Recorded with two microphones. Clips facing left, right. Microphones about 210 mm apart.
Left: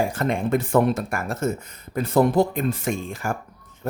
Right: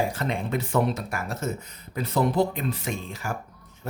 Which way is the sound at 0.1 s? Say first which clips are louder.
Left 6 dB; 50° left (ahead or behind).